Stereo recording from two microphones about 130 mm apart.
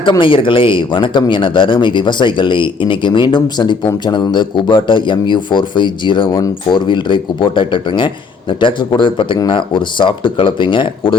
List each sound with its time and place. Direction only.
0.0 s speech: 40° left (ahead or behind)